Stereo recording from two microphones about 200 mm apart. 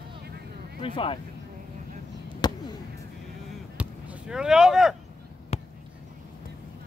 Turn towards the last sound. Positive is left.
turn(degrees=30)  # may be behind; listen again after turning